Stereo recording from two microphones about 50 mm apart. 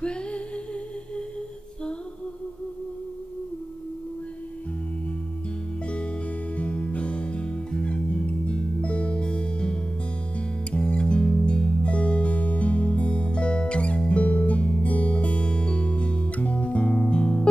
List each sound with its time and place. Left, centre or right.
0.0 s music: centre
5.9 s music: left